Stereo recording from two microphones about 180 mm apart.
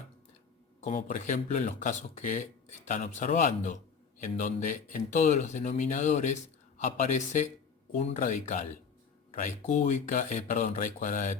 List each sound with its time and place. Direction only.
0.8 s speech: 45° left (ahead or behind)